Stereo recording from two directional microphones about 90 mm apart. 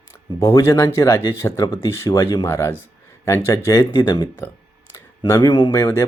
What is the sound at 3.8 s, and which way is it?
Speech, 60° left (ahead or behind).